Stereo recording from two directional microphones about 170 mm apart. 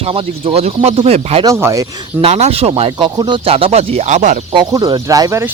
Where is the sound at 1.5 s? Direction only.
15° right (ahead or behind).